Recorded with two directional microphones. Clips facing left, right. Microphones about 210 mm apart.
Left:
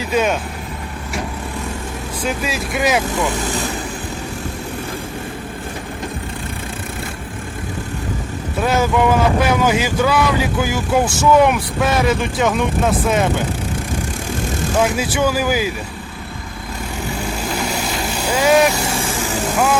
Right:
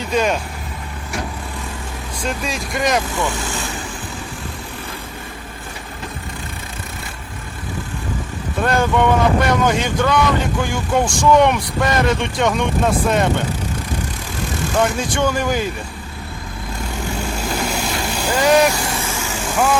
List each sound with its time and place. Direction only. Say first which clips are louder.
0.0 s speech: left 1 dB; 5° left (ahead or behind)
2.2 s speech: left 2 dB; 5° left (ahead or behind)
8.6 s speech: even; 5° left (ahead or behind)
14.8 s speech: left 1 dB; 5° left (ahead or behind)
17.7 s vehicle: even; 5° left (ahead or behind)
18.9 s vehicle: left 3 dB; 35° left (ahead or behind)